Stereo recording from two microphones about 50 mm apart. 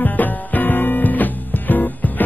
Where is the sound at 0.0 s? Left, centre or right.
Left.